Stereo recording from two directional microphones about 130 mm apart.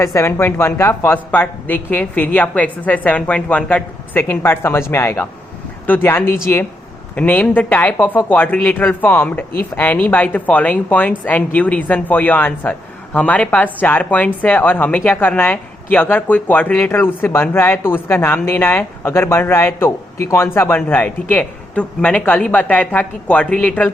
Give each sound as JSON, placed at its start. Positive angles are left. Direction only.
{"t": 0.0, "sound": "speech", "side_deg": 20}